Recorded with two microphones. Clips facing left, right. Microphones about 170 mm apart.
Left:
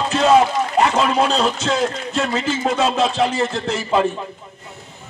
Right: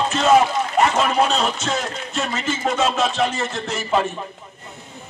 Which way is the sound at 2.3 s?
30° left (ahead or behind).